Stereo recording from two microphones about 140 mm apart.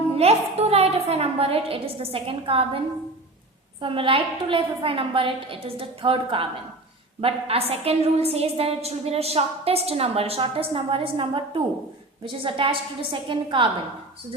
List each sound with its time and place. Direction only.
0.2 s a woman's voice: 50° right (ahead or behind)